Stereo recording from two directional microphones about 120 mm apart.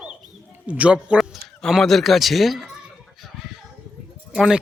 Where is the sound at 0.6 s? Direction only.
10° right (ahead or behind).